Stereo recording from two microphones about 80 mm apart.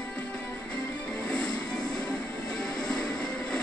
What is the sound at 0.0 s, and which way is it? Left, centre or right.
Music, centre.